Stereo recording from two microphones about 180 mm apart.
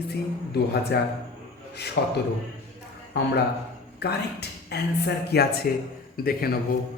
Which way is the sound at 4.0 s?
65° left (ahead or behind).